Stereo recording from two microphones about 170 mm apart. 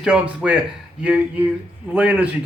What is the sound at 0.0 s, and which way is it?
Speech, 5° right (ahead or behind).